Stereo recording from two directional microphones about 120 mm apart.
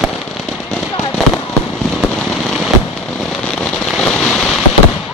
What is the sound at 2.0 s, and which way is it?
Fireworks, centre (ahead or behind).